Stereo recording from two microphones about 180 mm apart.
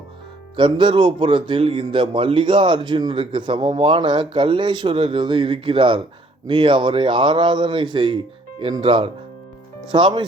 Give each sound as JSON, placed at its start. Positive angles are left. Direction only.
{"t": 0.5, "sound": "speech", "side_deg": -25}